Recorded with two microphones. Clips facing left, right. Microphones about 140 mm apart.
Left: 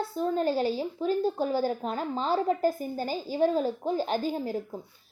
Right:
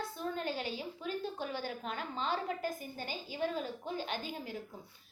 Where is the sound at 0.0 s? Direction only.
35° left (ahead or behind).